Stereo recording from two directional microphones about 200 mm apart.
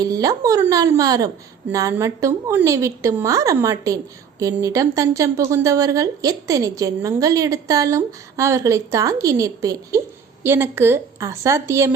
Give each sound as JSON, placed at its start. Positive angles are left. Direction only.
{"t": 0.0, "sound": "a woman's voice", "side_deg": -20}